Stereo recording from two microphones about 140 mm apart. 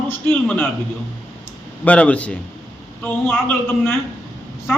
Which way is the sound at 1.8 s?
10° left (ahead or behind).